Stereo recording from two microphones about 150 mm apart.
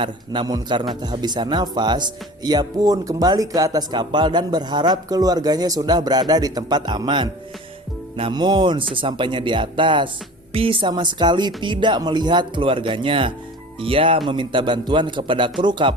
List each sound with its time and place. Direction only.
0.0 s speech: 30° right (ahead or behind)